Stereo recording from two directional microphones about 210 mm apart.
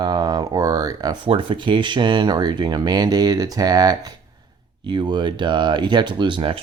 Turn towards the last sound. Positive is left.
turn(degrees=-25)  # may be behind; listen again after turning